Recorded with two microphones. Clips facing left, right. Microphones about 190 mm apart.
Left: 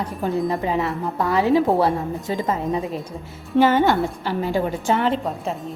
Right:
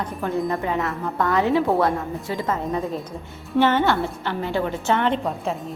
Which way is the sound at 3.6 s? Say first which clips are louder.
Left 2 dB; 10° left (ahead or behind).